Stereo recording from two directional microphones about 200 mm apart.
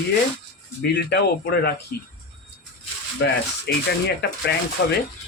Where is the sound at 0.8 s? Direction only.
55° left (ahead or behind).